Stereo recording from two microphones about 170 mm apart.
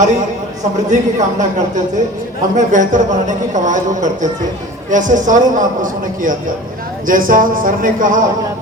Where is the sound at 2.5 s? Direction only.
50° right (ahead or behind).